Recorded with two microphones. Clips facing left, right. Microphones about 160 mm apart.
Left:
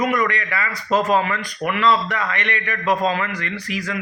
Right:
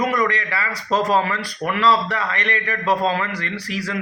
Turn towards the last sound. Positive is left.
turn(degrees=-35)  # may be behind; listen again after turning